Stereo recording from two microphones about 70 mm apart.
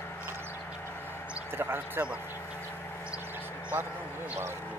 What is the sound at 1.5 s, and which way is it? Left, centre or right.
Speech, right.